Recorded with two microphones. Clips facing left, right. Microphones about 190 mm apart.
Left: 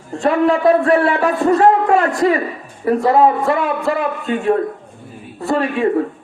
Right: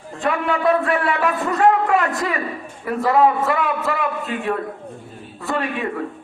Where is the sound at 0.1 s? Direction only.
35° left (ahead or behind).